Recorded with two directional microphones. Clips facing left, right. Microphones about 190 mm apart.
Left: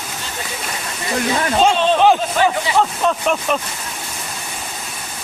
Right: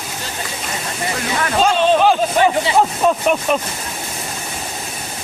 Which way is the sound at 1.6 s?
20° left (ahead or behind).